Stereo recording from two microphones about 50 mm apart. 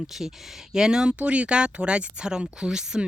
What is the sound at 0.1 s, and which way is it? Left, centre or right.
Speech, centre.